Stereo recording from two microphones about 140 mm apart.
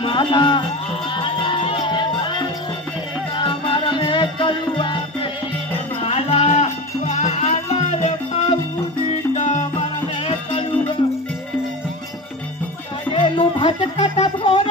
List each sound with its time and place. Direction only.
0.0 s speech: 35° left (ahead or behind)
1.1 s music: 35° left (ahead or behind)
5.9 s music: 45° left (ahead or behind)
13.1 s music: 45° left (ahead or behind)